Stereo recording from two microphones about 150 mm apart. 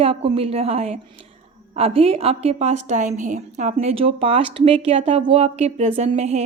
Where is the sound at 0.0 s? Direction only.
40° right (ahead or behind).